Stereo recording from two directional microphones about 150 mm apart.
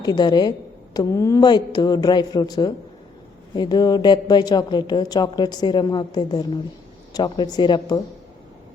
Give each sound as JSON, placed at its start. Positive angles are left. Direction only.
{"t": 0.0, "sound": "a woman's voice", "side_deg": 25}